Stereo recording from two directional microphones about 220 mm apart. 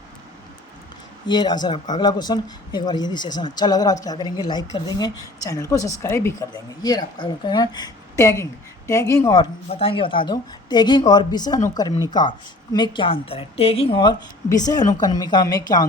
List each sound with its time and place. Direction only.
1.3 s a woman's voice: 20° left (ahead or behind)
9.6 s a woman's voice: 25° left (ahead or behind)